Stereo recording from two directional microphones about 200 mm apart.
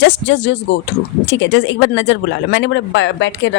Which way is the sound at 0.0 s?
60° left (ahead or behind).